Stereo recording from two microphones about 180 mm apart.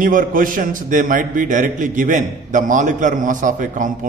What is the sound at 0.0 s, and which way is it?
A man's voice, 50° right (ahead or behind).